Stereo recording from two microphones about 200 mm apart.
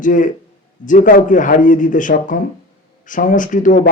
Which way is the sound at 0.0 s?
40° left (ahead or behind).